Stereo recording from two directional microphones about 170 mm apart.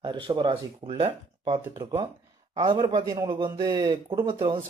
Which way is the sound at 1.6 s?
15° right (ahead or behind).